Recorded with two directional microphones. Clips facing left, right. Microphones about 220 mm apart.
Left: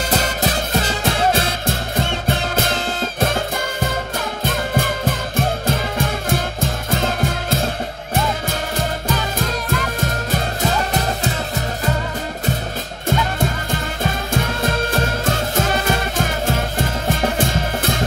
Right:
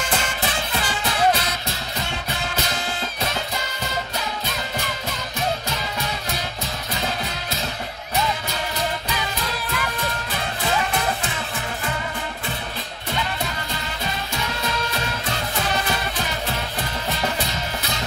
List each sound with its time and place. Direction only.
0.1 s music: 40° left (ahead or behind)
13.1 s music: 50° left (ahead or behind)